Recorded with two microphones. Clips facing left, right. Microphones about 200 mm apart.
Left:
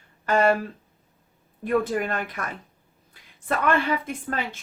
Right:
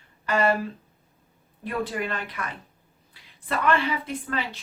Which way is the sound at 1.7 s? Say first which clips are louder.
Left 5 dB; 45° left (ahead or behind).